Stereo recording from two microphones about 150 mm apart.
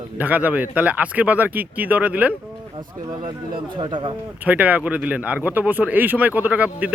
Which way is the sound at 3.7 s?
30° right (ahead or behind).